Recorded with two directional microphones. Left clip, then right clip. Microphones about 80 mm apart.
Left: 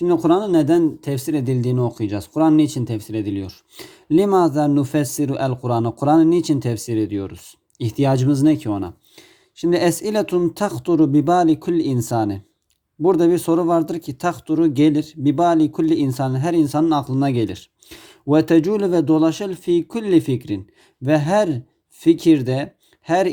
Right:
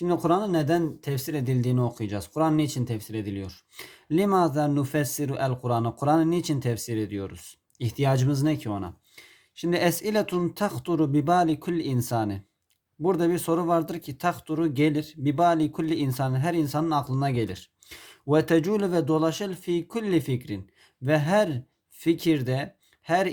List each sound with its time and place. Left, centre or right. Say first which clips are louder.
0.1 s speech: left 7 dB; left
0.8 s speech: left 10 dB; left
9.6 s speech: left 7 dB; left
13.0 s speech: left 9 dB; left
21.0 s speech: left 6 dB; left